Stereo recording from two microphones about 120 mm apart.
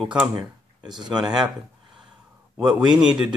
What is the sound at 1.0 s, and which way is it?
Speech, 35° right (ahead or behind).